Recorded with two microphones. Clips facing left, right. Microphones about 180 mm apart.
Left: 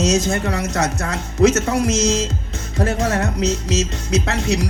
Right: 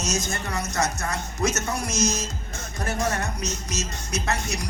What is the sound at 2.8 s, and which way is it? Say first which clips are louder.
Speech: left 7 dB; 80° left.